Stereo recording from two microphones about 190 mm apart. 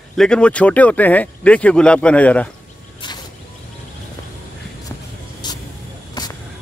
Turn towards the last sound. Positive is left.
turn(degrees=25)  # may be behind; listen again after turning